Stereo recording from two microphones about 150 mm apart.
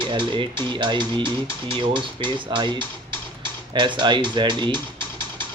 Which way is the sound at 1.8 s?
35° right (ahead or behind).